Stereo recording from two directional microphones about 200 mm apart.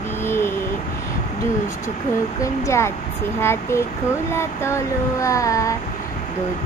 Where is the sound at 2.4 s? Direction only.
15° left (ahead or behind).